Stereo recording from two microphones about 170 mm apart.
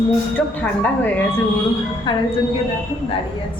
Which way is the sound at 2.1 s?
25° left (ahead or behind).